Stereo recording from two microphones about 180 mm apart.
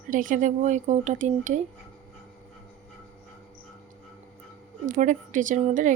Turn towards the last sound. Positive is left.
turn(degrees=-45)  # may be behind; listen again after turning